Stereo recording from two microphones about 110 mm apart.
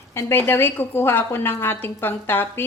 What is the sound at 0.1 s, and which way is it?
A woman's voice, 20° left (ahead or behind).